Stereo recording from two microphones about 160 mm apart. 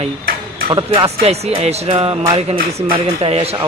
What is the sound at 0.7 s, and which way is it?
A man's voice, 30° right (ahead or behind).